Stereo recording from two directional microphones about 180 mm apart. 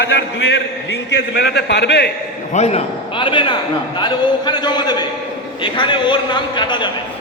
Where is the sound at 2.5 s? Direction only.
40° left (ahead or behind).